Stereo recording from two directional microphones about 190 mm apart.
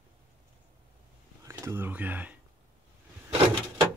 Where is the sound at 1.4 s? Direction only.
15° right (ahead or behind).